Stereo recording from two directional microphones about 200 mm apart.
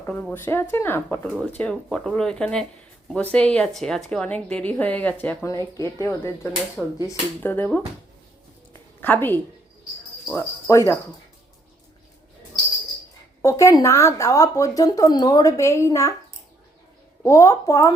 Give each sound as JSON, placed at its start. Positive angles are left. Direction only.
{"t": 0.0, "sound": "a woman's voice", "side_deg": 10}
{"t": 8.7, "sound": "a sound", "side_deg": 10}
{"t": 10.3, "sound": "speech", "side_deg": 15}
{"t": 13.4, "sound": "speech", "side_deg": 15}
{"t": 17.2, "sound": "speech", "side_deg": 15}